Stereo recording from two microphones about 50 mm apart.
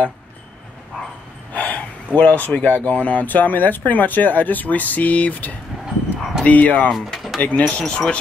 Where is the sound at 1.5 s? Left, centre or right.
Left.